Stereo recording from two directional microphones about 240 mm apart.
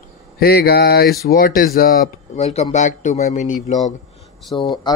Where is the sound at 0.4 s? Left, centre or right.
Left.